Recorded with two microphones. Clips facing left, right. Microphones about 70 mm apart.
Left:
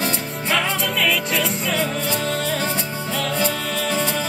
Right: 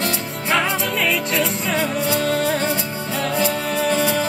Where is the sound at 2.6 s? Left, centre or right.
Centre.